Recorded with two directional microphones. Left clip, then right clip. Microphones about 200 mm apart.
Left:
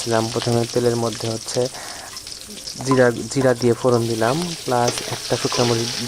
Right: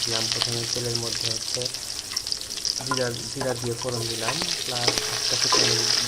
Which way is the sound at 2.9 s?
45° left (ahead or behind).